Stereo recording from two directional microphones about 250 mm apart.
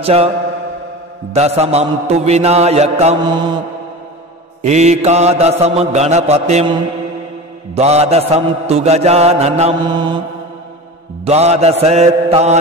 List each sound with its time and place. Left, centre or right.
0.0 s mantra: right
1.3 s mantra: right
11.2 s mantra: right